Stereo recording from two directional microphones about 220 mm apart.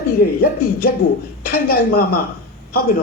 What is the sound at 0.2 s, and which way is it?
A man's voice, 40° left (ahead or behind).